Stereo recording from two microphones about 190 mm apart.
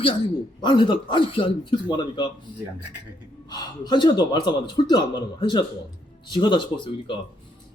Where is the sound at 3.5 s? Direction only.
20° left (ahead or behind).